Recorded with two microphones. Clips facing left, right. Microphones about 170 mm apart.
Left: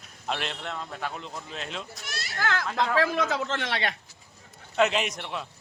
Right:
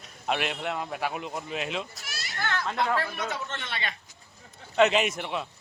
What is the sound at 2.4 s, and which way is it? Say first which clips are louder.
A man's voice: left 1 dB; 90° left.